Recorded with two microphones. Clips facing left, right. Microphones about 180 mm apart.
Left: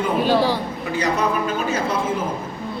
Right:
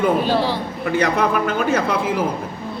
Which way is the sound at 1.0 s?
60° right (ahead or behind).